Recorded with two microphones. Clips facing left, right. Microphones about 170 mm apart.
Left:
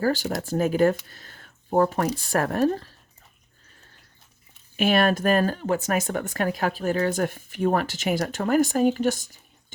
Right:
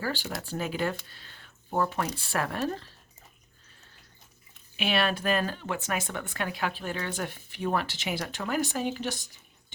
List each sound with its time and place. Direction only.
0.0 s speech: 45° left (ahead or behind)
1.1 s a sound: 45° left (ahead or behind)
2.0 s speech: 40° left (ahead or behind)
4.8 s speech: 45° left (ahead or behind)